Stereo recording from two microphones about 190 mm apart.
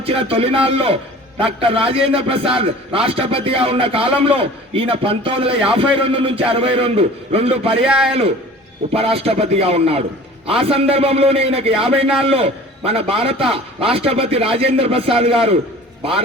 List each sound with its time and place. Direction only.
0.0 s a man's voice: 30° right (ahead or behind)
7.9 s a man's voice: 5° right (ahead or behind)
8.9 s a man's voice: 30° right (ahead or behind)